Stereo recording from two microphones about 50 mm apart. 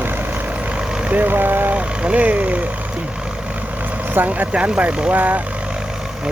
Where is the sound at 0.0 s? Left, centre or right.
Right; by 1.1 s centre.